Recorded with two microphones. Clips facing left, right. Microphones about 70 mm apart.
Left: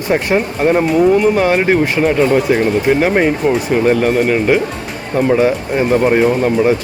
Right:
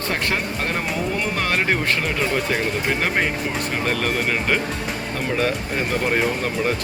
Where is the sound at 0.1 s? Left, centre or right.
Centre.